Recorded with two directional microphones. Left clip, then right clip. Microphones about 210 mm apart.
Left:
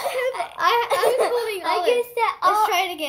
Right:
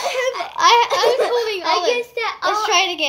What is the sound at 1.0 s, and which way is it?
Giggle, 25° left (ahead or behind).